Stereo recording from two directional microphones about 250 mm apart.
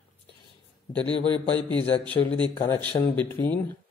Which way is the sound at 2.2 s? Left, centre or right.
Left.